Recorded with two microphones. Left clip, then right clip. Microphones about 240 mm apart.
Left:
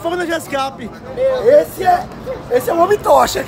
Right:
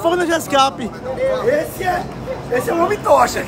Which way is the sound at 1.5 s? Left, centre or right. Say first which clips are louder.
Left 7 dB; left.